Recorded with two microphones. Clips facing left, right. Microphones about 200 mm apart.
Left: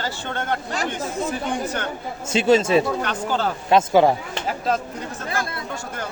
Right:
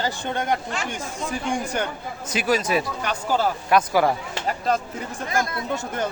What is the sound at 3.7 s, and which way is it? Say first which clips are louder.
Speech: left 5 dB; 25° left (ahead or behind).